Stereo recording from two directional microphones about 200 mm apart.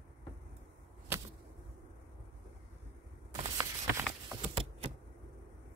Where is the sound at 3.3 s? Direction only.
15° right (ahead or behind).